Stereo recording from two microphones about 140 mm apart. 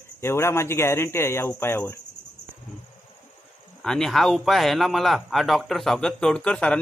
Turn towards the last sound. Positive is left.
turn(degrees=10)  # may be behind; listen again after turning